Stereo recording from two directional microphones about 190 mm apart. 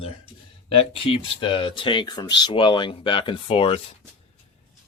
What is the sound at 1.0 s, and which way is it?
Speech, 25° left (ahead or behind).